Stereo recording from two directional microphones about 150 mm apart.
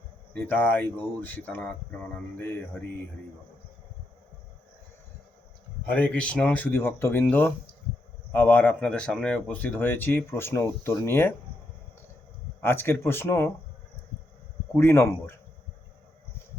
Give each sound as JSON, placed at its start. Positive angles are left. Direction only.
{"t": 0.3, "sound": "speech", "side_deg": 10}
{"t": 5.8, "sound": "speech", "side_deg": 10}
{"t": 12.6, "sound": "speech", "side_deg": 15}
{"t": 14.8, "sound": "speech", "side_deg": 15}